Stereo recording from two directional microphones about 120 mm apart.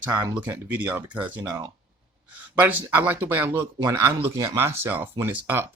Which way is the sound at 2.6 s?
15° right (ahead or behind).